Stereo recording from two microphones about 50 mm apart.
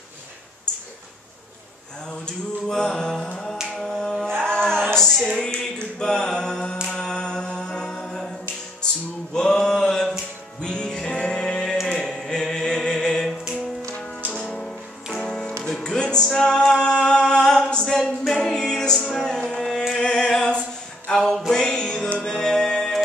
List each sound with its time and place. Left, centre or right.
2.0 s mantra: centre
3.7 s finger snapping: centre
4.4 s female singing: centre
5.4 s music: centre
6.9 s mantra: centre
9.3 s a sound: centre
10.6 s music: centre
16.3 s a capella: centre
18.2 s music: centre
19.2 s carnatic music: centre
20.0 s music: centre